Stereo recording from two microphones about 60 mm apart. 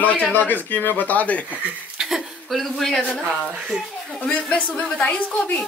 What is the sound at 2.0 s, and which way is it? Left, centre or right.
Chuckle, centre.